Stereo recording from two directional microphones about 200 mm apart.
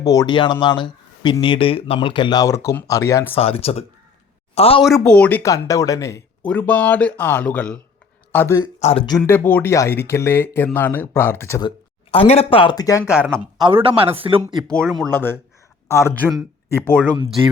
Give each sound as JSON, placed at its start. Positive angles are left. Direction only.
{"t": 0.0, "sound": "speech", "side_deg": 15}
{"t": 3.3, "sound": "speech", "side_deg": 30}
{"t": 4.9, "sound": "speech", "side_deg": 5}
{"t": 8.8, "sound": "speech", "side_deg": 30}
{"t": 12.1, "sound": "speech", "side_deg": 30}
{"t": 13.1, "sound": "speech", "side_deg": -5}
{"t": 13.6, "sound": "speech", "side_deg": -25}
{"t": 14.4, "sound": "speech", "side_deg": 5}